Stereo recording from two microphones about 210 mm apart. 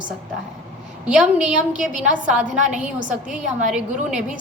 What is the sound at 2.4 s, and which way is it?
Speech, 35° right (ahead or behind).